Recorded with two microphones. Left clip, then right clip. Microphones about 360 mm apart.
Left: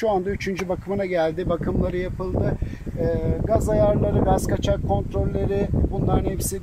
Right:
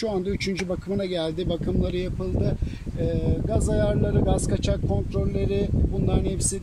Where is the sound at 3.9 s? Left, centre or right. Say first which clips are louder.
Left 4 dB; left.